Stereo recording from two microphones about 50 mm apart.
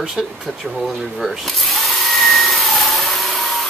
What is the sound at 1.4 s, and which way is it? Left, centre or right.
Vacuum cleaner, centre.